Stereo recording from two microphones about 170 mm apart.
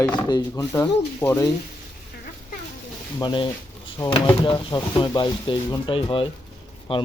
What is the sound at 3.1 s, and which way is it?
Speech, 25° left (ahead or behind).